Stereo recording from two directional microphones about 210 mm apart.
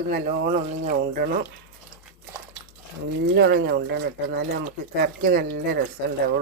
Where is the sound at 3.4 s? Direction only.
50° right (ahead or behind).